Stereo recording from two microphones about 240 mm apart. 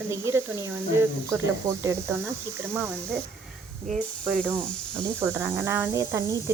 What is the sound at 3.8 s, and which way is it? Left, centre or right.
Speech, right.